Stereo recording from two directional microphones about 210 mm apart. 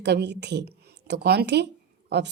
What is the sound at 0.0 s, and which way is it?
A woman's voice, 55° right (ahead or behind).